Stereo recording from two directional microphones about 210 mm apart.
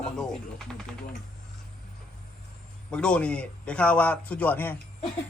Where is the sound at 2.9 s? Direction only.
5° left (ahead or behind).